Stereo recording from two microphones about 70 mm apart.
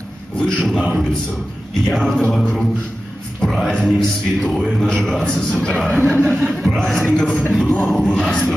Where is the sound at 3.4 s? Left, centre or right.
Centre.